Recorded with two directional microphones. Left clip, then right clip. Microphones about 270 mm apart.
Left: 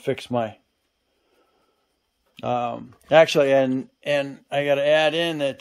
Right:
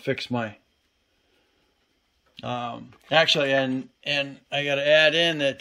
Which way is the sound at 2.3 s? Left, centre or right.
Centre.